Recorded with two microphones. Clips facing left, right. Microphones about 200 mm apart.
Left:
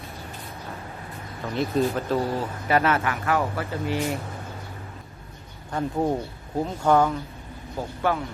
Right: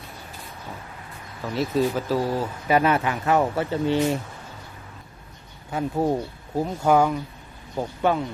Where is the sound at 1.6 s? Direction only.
5° right (ahead or behind); by 4.0 s 25° right (ahead or behind).